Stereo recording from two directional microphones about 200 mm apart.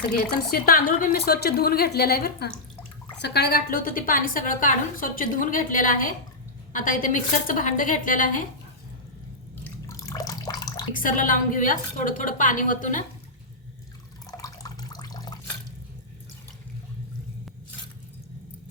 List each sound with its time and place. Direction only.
0.5 s a woman's voice: 45° left (ahead or behind)
9.9 s water: 15° left (ahead or behind)
10.9 s a woman's voice: 40° left (ahead or behind)
14.3 s water: 15° left (ahead or behind)